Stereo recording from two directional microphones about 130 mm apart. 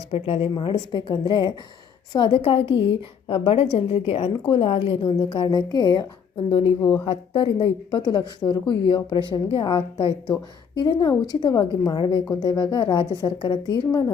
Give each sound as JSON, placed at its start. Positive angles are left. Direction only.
{"t": 0.1, "sound": "a woman's voice", "side_deg": 50}
{"t": 10.8, "sound": "a woman's voice", "side_deg": 30}